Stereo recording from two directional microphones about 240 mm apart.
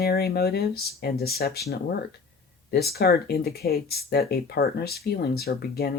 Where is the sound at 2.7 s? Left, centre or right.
Left.